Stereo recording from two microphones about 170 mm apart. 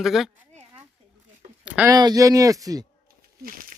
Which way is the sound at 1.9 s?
25° right (ahead or behind).